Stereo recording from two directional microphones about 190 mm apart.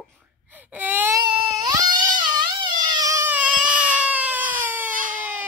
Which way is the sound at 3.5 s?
45° right (ahead or behind).